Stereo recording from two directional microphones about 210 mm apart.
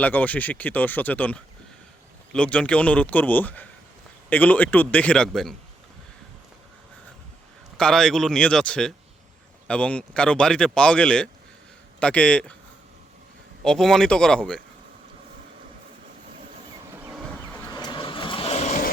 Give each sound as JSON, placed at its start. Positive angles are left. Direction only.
{"t": 0.0, "sound": "a man's voice", "side_deg": 10}
{"t": 7.8, "sound": "a man's voice", "side_deg": 5}
{"t": 13.7, "sound": "a man's voice", "side_deg": 0}
{"t": 17.7, "sound": "vehicle", "side_deg": 20}